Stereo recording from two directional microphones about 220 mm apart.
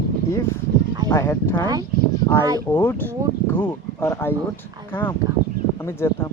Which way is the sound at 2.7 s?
10° left (ahead or behind).